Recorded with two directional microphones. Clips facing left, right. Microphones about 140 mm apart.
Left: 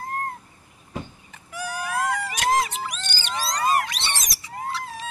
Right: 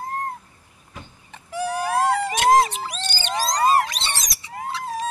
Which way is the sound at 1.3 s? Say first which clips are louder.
Right 7 dB; 30° right (ahead or behind).